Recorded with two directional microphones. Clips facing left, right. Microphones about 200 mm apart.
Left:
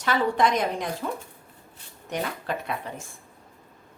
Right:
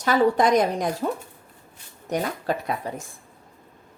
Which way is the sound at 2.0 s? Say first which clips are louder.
Right 4 dB; 40° right (ahead or behind).